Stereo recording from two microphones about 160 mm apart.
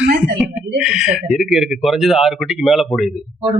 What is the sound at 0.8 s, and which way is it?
Speech, 5° right (ahead or behind).